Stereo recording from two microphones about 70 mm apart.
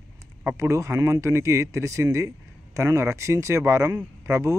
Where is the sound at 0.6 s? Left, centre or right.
Right.